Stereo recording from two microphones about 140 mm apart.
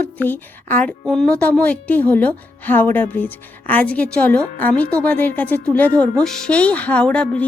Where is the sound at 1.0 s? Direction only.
Centre (ahead or behind).